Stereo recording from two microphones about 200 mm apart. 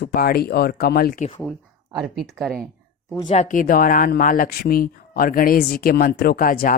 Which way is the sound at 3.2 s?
40° left (ahead or behind).